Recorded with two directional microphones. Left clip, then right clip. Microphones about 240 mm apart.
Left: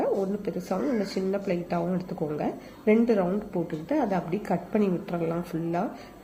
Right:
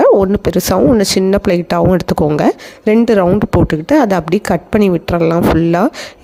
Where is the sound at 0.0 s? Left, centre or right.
Right.